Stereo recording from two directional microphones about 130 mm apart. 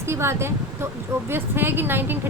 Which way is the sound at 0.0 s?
20° right (ahead or behind).